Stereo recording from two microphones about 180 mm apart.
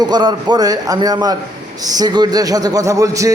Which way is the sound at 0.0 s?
25° right (ahead or behind).